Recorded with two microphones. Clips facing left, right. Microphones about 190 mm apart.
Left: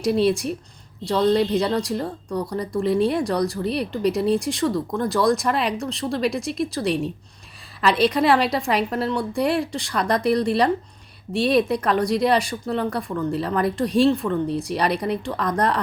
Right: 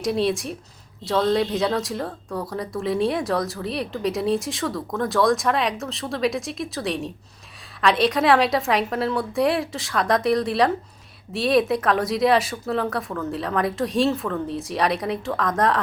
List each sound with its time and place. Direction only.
0.0 s a woman's voice: centre (ahead or behind)